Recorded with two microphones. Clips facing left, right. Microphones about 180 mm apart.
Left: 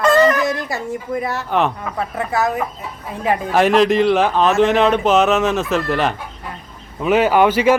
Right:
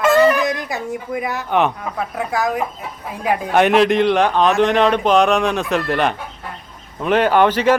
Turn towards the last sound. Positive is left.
turn(degrees=10)  # may be behind; listen again after turning